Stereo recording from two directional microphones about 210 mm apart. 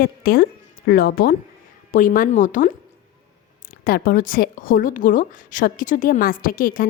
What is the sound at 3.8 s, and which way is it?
A woman's voice, 45° left (ahead or behind).